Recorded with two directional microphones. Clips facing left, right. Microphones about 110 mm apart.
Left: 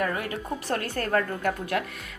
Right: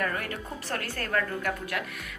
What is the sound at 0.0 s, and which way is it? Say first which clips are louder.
A woman's voice: left 3 dB; 15° left (ahead or behind).